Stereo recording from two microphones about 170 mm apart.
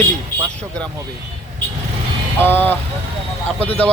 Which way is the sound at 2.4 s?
10° left (ahead or behind).